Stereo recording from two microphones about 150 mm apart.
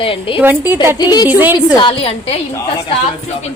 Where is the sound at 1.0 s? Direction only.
25° left (ahead or behind).